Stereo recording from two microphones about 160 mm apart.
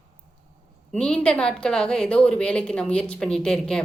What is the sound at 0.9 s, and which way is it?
A woman's voice, 5° left (ahead or behind).